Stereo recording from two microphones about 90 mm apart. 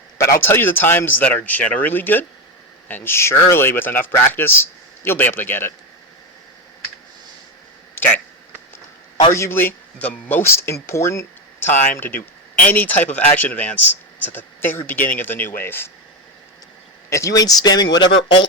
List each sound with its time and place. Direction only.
0.2 s speech: 25° left (ahead or behind)
9.3 s speech: 30° left (ahead or behind)
17.1 s speech: 35° left (ahead or behind); by 18.3 s 60° left (ahead or behind)